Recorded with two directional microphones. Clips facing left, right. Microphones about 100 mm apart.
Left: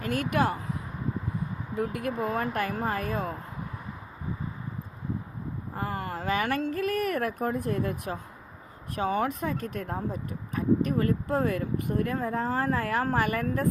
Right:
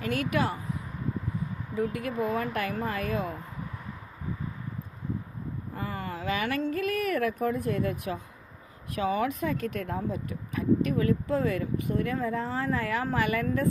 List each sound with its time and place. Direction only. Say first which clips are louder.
0.0 s speech: left 1 dB; 45° left (ahead or behind)
1.7 s speech: even; 55° left (ahead or behind)
5.7 s speech: left 3 dB; 55° left (ahead or behind)